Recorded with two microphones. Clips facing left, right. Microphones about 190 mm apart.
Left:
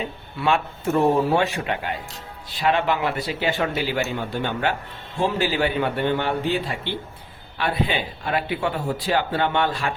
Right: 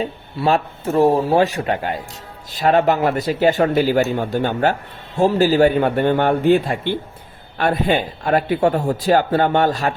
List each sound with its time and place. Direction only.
0.0 s speech: 35° right (ahead or behind)